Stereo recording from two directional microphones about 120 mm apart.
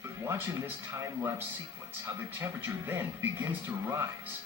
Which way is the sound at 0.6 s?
20° right (ahead or behind).